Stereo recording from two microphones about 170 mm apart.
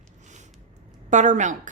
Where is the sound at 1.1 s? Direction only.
45° right (ahead or behind).